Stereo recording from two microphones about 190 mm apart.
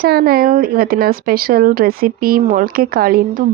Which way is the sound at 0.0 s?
55° right (ahead or behind).